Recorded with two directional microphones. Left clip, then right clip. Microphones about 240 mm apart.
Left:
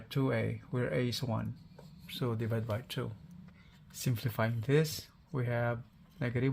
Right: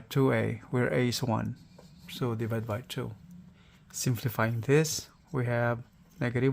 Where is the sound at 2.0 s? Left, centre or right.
Right.